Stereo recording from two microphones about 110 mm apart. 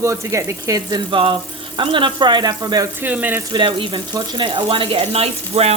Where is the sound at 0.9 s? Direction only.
50° right (ahead or behind).